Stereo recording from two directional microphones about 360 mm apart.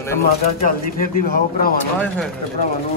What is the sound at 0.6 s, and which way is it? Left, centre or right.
Speech, left.